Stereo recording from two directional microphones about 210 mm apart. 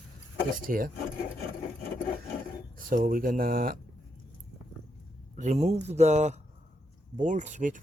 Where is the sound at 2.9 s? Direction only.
40° right (ahead or behind).